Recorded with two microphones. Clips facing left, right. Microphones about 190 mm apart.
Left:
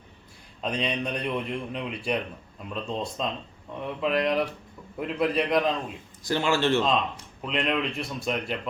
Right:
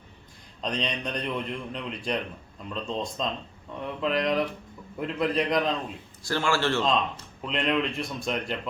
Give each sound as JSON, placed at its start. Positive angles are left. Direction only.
{"t": 0.6, "sound": "a man's voice", "side_deg": 5}
{"t": 6.2, "sound": "speech", "side_deg": 20}
{"t": 7.4, "sound": "speech", "side_deg": 0}